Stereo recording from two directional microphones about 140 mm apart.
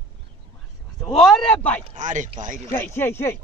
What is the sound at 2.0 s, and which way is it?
Speech, 65° right (ahead or behind).